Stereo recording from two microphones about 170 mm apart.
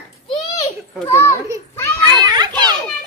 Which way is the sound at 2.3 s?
25° right (ahead or behind).